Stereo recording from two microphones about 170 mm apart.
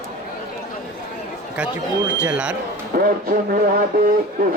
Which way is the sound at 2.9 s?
60° right (ahead or behind).